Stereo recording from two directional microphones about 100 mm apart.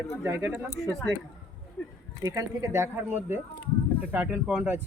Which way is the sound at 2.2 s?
35° right (ahead or behind).